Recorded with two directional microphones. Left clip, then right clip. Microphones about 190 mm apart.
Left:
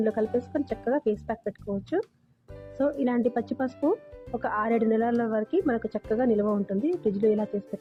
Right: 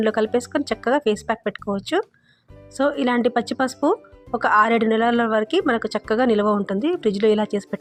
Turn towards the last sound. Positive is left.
turn(degrees=-25)  # may be behind; listen again after turning